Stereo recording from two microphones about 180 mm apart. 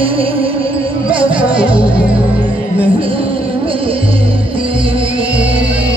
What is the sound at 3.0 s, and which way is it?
Music, 30° right (ahead or behind).